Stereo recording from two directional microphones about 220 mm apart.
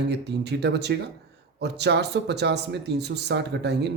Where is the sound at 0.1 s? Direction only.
50° right (ahead or behind).